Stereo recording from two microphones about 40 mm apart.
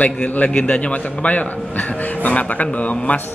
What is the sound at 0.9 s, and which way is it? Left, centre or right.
A man's voice, left.